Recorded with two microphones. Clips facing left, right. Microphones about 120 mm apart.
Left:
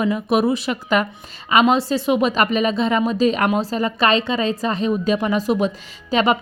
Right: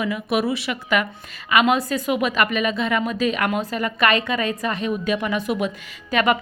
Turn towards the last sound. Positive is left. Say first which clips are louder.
# left 2 dB
turn(degrees=25)  # may be behind; listen again after turning